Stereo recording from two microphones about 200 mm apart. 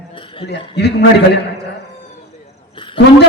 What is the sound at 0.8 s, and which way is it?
Speech, 55° left (ahead or behind).